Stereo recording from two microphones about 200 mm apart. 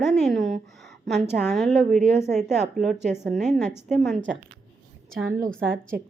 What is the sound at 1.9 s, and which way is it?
Speech, 35° right (ahead or behind).